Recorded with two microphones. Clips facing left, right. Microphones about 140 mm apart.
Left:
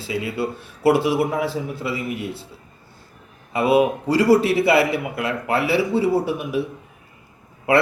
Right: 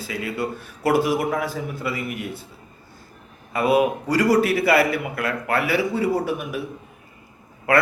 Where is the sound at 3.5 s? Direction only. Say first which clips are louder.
Left 2 dB; 30° left (ahead or behind).